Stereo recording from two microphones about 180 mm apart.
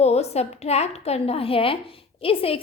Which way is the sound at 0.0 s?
35° left (ahead or behind).